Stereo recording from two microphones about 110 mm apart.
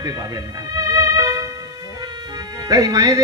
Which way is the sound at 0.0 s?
35° right (ahead or behind).